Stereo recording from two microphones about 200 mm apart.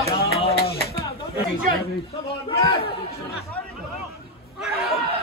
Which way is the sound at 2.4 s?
30° left (ahead or behind).